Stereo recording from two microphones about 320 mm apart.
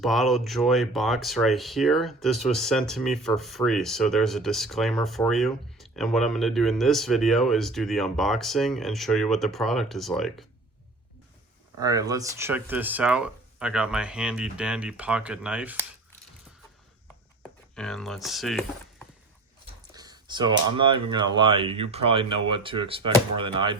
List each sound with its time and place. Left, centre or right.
0.0 s speech: centre
11.8 s speech: centre
17.7 s speech: centre
19.9 s speech: centre